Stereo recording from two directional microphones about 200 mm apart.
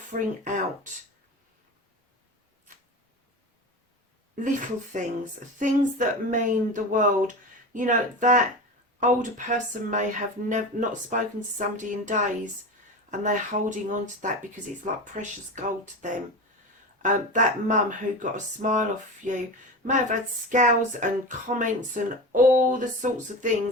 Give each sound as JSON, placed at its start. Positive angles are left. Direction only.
{"t": 0.1, "sound": "speech", "side_deg": -40}
{"t": 4.9, "sound": "speech", "side_deg": -35}